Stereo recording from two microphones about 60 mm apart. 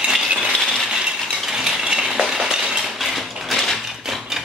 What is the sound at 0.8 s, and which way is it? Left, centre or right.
Mechanisms, centre.